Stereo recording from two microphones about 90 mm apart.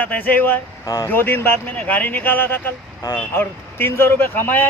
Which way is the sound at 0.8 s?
35° left (ahead or behind).